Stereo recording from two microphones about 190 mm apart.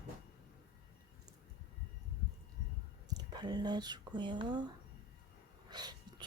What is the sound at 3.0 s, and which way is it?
Speech, 20° right (ahead or behind).